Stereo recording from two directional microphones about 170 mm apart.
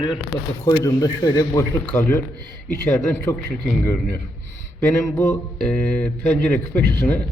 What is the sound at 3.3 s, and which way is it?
Speech, 15° left (ahead or behind).